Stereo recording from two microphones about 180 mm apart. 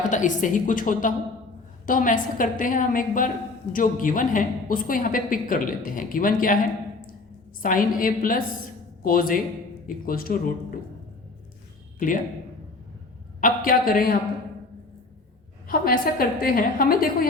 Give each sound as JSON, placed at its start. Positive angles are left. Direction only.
{"t": 0.1, "sound": "a woman's voice", "side_deg": 45}
{"t": 7.6, "sound": "a woman's voice", "side_deg": 50}
{"t": 11.9, "sound": "speech", "side_deg": 50}
{"t": 13.4, "sound": "a woman's voice", "side_deg": 50}
{"t": 15.6, "sound": "a woman's voice", "side_deg": 55}